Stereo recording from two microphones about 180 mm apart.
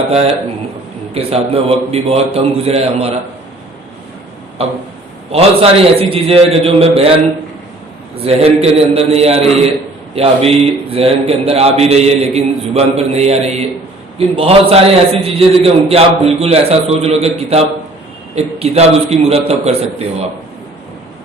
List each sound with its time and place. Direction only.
1.1 s a man's voice: 35° right (ahead or behind)
5.3 s a man's voice: 35° right (ahead or behind)
8.1 s a man's voice: 35° right (ahead or behind)